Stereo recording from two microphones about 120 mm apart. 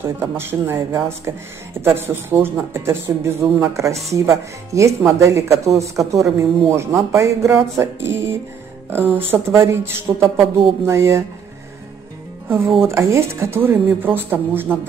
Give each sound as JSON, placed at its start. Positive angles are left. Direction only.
{"t": 0.0, "sound": "speech", "side_deg": -20}
{"t": 12.4, "sound": "speech", "side_deg": -20}